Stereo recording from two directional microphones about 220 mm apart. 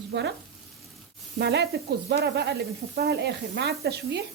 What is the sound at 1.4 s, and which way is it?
Speech, 50° right (ahead or behind).